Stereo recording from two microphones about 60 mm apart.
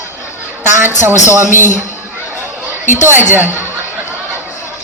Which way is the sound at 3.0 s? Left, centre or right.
Right.